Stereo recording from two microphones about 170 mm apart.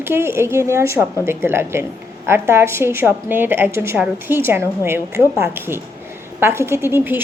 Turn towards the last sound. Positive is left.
turn(degrees=-10)  # may be behind; listen again after turning